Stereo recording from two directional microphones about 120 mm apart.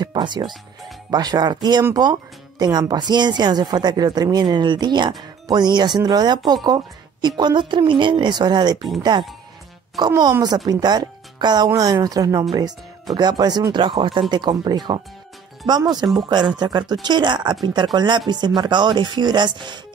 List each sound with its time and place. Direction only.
0.0 s music: 40° right (ahead or behind)
1.1 s speech: 35° right (ahead or behind)
9.9 s speech: 35° right (ahead or behind)